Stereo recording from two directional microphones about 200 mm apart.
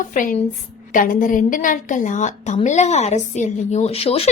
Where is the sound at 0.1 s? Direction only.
40° left (ahead or behind).